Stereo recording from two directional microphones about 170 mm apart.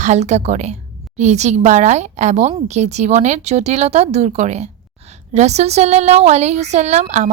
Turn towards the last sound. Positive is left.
turn(degrees=-45)  # may be behind; listen again after turning